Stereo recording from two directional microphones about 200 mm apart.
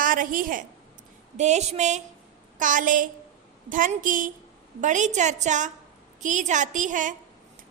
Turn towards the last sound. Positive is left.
turn(degrees=-40)  # may be behind; listen again after turning